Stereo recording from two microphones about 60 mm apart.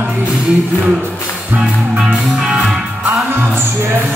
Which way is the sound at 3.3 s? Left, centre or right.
Right.